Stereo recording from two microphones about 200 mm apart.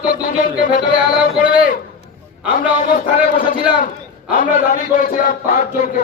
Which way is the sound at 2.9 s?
40° left (ahead or behind).